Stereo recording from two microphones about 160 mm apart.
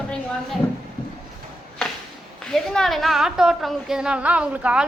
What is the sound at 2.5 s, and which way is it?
A woman's voice, centre (ahead or behind).